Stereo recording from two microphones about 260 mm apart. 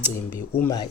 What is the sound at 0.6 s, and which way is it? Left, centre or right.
Speech, centre.